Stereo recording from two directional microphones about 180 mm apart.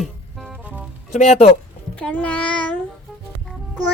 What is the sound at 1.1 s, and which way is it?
Speech, 40° left (ahead or behind).